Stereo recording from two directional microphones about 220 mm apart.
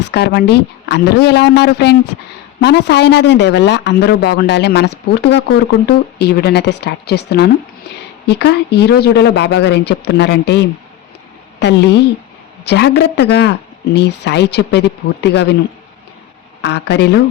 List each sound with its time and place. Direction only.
0.0 s speech: 50° left (ahead or behind)
16.6 s speech: 50° left (ahead or behind)